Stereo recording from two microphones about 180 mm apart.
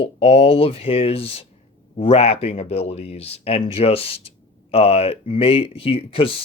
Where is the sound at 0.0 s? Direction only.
30° left (ahead or behind).